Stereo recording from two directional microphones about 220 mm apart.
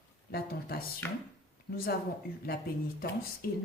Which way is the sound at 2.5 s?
45° left (ahead or behind).